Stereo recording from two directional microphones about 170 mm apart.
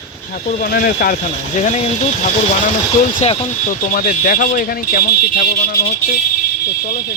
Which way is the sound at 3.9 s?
55° left (ahead or behind).